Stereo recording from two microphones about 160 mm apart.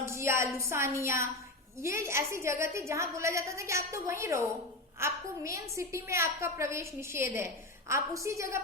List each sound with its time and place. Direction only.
0.0 s a woman's voice: 15° right (ahead or behind)